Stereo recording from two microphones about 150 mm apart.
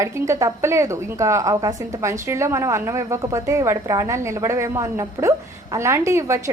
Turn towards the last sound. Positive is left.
turn(degrees=-20)  # may be behind; listen again after turning